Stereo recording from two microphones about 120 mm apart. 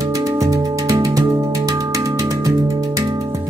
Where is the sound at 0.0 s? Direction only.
30° right (ahead or behind).